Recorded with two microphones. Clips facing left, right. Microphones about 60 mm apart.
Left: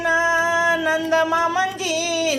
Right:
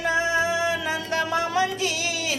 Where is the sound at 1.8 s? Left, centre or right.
Right.